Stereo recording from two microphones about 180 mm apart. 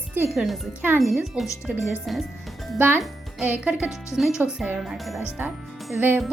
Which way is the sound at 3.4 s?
10° right (ahead or behind).